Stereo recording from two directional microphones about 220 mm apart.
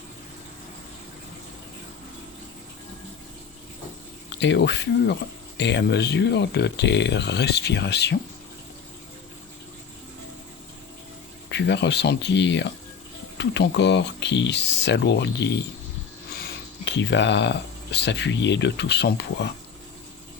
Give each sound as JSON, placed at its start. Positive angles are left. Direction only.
{"t": 4.3, "sound": "speech", "side_deg": 50}
{"t": 11.5, "sound": "speech", "side_deg": 50}
{"t": 16.8, "sound": "speech", "side_deg": 55}